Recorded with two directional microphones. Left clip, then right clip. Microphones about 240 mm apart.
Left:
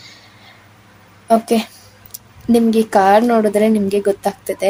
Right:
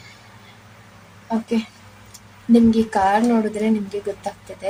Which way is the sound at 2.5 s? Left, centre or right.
Left.